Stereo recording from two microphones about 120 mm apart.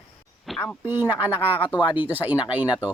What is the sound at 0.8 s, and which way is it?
Speech, 15° right (ahead or behind).